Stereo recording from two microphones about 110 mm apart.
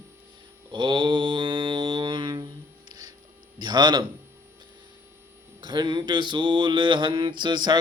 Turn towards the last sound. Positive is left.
turn(degrees=-40)  # may be behind; listen again after turning